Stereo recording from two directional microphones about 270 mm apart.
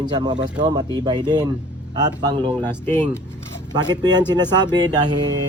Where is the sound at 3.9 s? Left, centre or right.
Centre.